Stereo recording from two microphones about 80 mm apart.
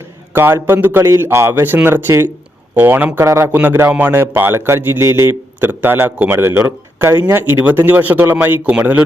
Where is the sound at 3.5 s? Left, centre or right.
Right.